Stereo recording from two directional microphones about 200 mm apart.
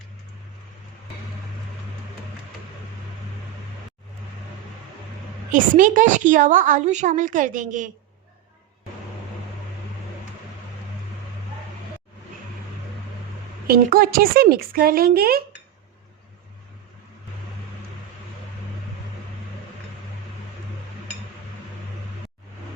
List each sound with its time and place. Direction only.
5.5 s a woman's voice: 40° right (ahead or behind)
13.7 s speech: 50° right (ahead or behind)